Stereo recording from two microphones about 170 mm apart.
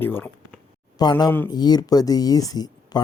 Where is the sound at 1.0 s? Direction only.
25° left (ahead or behind).